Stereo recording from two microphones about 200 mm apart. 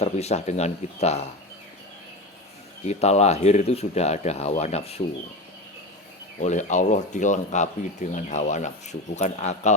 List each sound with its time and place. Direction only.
0.0 s speech: 30° left (ahead or behind)
2.8 s speech: 35° left (ahead or behind)
6.4 s speech: 35° left (ahead or behind)